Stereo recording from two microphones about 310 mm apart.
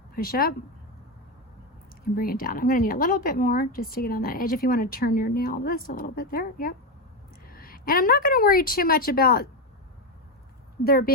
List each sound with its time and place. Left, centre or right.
0.2 s speech: left
2.1 s a woman's voice: left
10.8 s speech: left